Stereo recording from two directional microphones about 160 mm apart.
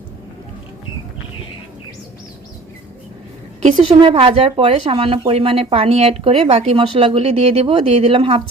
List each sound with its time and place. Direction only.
3.8 s speech: 35° right (ahead or behind)